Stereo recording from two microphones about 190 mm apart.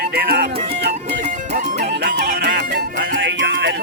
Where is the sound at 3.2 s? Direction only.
75° right (ahead or behind).